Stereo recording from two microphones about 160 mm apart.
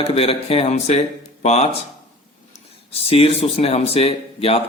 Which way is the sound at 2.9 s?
35° left (ahead or behind).